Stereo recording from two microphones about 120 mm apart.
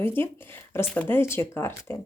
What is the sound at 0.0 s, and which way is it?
A woman's voice, 20° left (ahead or behind).